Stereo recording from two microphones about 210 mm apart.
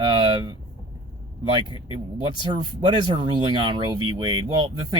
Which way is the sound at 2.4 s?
20° right (ahead or behind).